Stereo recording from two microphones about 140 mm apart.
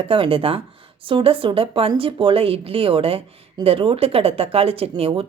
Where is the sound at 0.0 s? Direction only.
40° right (ahead or behind).